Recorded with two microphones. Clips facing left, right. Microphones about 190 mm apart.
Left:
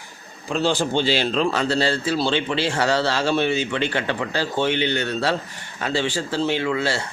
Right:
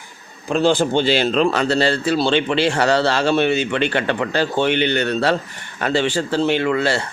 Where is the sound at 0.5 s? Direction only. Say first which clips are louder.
Right 5 dB; 55° right (ahead or behind).